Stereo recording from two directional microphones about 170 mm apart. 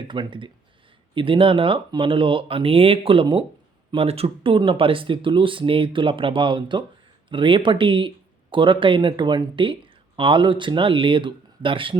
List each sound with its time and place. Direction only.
0.0 s speech: 30° right (ahead or behind)